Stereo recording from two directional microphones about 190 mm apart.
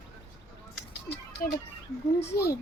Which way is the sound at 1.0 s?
55° left (ahead or behind).